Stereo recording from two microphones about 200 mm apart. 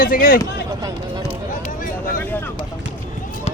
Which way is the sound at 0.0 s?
45° left (ahead or behind).